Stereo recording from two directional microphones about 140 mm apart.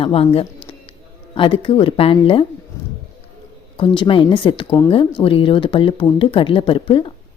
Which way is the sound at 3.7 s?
35° left (ahead or behind).